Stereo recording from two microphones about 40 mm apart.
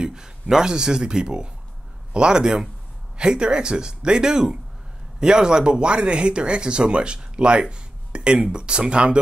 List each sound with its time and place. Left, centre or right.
0.0 s speech: centre